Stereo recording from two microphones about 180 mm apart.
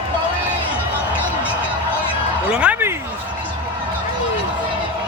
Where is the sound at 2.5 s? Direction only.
5° right (ahead or behind).